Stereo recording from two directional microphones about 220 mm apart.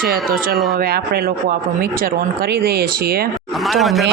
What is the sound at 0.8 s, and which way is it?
Speech, 45° right (ahead or behind).